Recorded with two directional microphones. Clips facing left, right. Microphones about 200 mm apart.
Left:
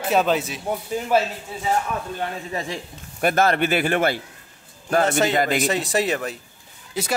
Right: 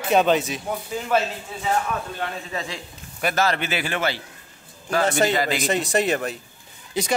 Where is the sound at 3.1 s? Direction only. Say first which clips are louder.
Left 4 dB; 50° left (ahead or behind).